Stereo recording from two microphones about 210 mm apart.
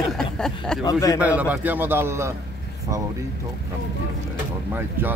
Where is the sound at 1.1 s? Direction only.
5° right (ahead or behind).